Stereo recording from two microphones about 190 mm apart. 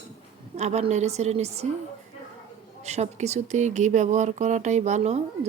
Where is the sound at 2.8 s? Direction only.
35° right (ahead or behind).